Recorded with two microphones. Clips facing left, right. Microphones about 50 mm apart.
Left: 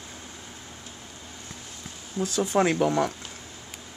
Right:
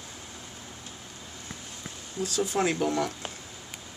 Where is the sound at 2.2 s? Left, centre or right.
Left.